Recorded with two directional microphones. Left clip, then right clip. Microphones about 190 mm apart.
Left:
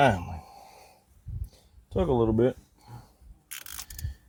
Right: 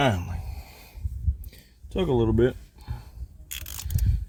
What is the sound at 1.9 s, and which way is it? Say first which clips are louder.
Speech: right 1 dB; 50° right (ahead or behind).